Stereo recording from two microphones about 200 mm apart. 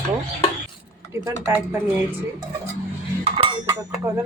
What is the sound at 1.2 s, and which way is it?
Speech, 15° right (ahead or behind).